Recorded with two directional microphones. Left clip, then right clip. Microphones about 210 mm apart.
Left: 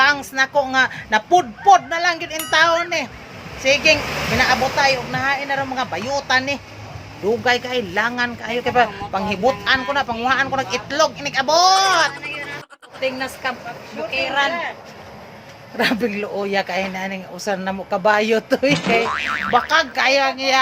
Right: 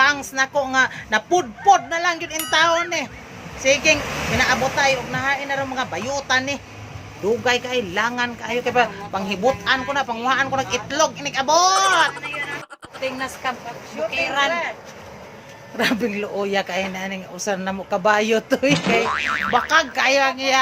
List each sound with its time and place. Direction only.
0.0 s a man's voice: centre (ahead or behind)
13.0 s a woman's voice: 20° left (ahead or behind)
14.1 s a man's voice: centre (ahead or behind)
15.8 s a man's voice: centre (ahead or behind)